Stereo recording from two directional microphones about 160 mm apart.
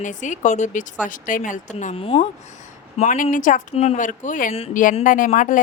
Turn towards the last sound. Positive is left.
turn(degrees=55)  # may be behind; listen again after turning